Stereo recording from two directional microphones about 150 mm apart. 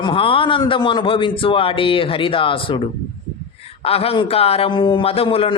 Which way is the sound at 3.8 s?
40° left (ahead or behind).